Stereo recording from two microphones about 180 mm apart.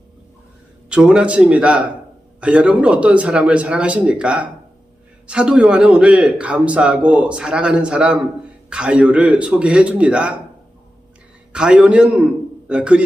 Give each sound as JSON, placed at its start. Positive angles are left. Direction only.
{"t": 0.9, "sound": "a man's voice", "side_deg": -5}
{"t": 11.5, "sound": "a man's voice", "side_deg": -5}